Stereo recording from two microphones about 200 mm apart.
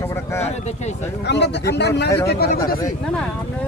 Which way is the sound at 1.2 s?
60° left (ahead or behind).